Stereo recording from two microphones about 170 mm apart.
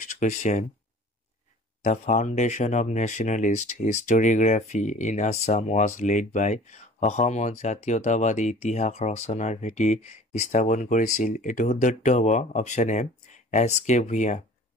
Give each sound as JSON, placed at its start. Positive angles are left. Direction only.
{"t": 0.0, "sound": "speech", "side_deg": 45}
{"t": 1.8, "sound": "speech", "side_deg": 45}